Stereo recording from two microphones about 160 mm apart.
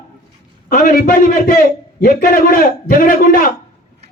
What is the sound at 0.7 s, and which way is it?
A man's voice, 60° left (ahead or behind).